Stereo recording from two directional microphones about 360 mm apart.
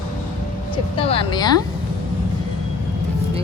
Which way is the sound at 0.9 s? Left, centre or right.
Centre.